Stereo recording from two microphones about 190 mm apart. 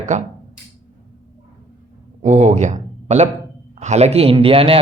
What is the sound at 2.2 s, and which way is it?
A man's voice, 35° right (ahead or behind).